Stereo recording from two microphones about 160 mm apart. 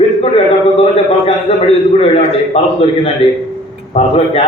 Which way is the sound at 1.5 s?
30° left (ahead or behind).